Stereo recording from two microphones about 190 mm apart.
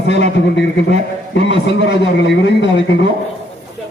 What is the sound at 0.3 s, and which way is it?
A man's voice, 65° left (ahead or behind).